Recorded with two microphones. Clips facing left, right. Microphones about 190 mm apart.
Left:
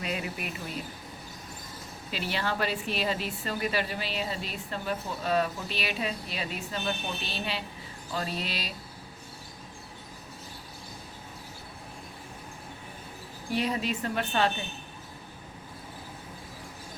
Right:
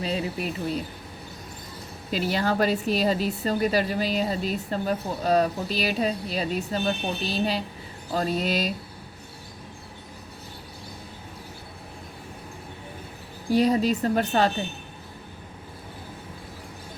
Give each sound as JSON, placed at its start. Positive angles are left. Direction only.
{"t": 0.0, "sound": "speech", "side_deg": -30}
{"t": 2.0, "sound": "speech", "side_deg": -40}
{"t": 13.5, "sound": "speech", "side_deg": -35}